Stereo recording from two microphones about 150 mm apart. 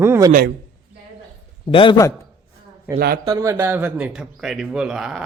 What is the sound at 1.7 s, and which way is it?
Speech, 35° left (ahead or behind).